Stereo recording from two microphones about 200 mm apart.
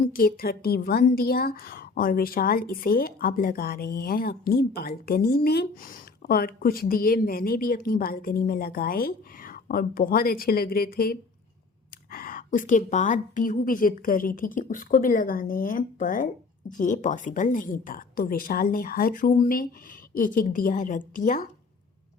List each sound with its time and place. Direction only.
0.0 s a woman's voice: 45° left (ahead or behind)